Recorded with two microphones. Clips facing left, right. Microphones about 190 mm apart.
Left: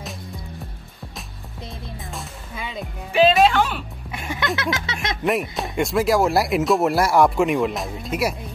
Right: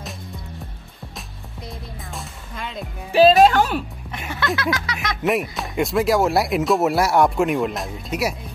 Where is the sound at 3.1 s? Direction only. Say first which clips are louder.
Right 3 dB; 35° right (ahead or behind).